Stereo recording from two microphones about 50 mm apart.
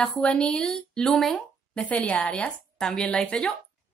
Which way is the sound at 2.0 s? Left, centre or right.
Left.